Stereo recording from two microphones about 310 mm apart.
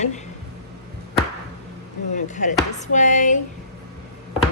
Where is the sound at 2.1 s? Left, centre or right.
Left.